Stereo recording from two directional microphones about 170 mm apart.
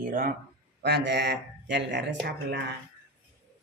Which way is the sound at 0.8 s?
75° right (ahead or behind).